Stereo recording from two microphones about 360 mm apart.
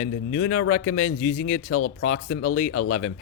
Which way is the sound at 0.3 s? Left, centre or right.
Left.